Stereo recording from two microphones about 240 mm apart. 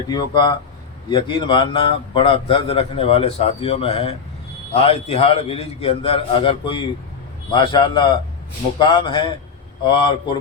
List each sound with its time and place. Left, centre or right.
0.1 s a man's voice: centre